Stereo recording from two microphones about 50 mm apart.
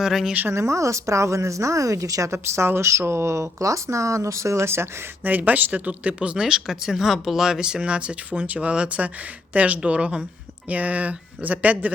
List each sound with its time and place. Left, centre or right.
0.0 s speech: centre
0.5 s speech: right
5.2 s speech: right